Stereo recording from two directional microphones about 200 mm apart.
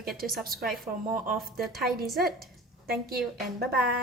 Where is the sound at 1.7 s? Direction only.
50° right (ahead or behind).